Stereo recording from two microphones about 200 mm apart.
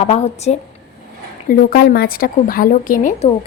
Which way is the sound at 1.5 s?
50° left (ahead or behind).